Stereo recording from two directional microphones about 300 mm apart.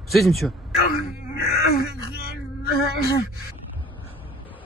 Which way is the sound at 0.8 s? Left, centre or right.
Left.